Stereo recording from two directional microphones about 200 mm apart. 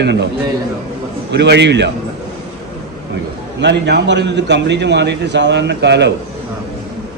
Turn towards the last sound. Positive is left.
turn(degrees=-60)  # may be behind; listen again after turning